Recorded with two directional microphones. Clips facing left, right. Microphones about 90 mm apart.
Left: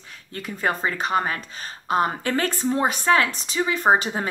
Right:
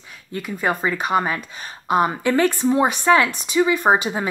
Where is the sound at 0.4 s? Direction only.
15° right (ahead or behind).